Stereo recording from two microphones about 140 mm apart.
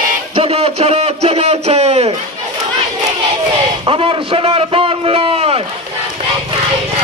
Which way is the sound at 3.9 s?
40° right (ahead or behind).